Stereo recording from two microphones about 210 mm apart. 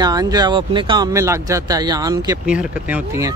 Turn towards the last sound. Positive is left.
turn(degrees=-10)  # may be behind; listen again after turning